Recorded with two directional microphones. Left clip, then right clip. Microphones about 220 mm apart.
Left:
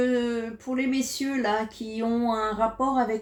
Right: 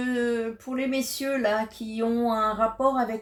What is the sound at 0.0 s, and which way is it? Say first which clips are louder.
Speech: left 1 dB; 25° right (ahead or behind).